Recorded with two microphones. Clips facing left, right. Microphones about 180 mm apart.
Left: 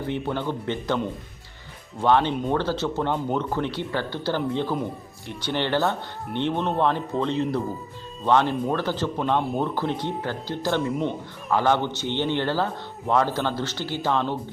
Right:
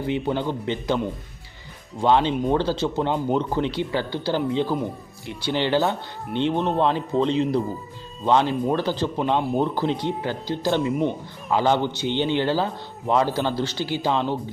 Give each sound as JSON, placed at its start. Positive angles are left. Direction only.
{"t": 0.0, "sound": "speech", "side_deg": -15}